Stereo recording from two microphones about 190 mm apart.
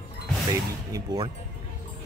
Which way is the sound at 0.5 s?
20° right (ahead or behind).